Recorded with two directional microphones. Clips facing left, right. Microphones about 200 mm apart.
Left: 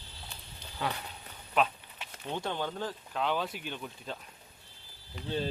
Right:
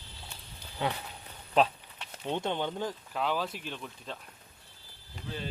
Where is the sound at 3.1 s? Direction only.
Centre (ahead or behind).